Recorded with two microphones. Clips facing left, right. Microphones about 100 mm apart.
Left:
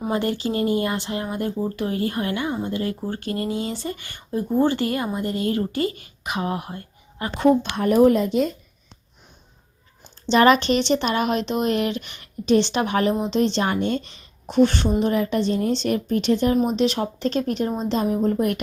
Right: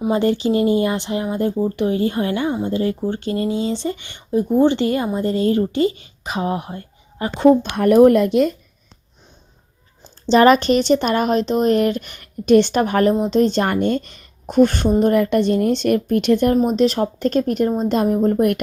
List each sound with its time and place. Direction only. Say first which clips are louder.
0.1 s speech: right 6 dB; 25° right (ahead or behind)
7.8 s a woman's voice: right 6 dB; 55° right (ahead or behind)
10.0 s a woman's voice: right 4 dB; 35° right (ahead or behind); by 16.6 s 55° right (ahead or behind)
16.7 s speech: right 5 dB; 40° right (ahead or behind)